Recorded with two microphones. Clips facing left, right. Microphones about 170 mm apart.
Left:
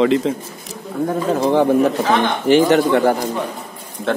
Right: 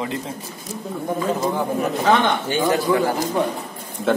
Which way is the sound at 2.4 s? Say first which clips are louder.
Left 7 dB; 85° left.